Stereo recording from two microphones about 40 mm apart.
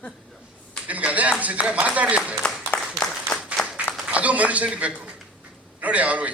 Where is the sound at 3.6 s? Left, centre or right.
Centre.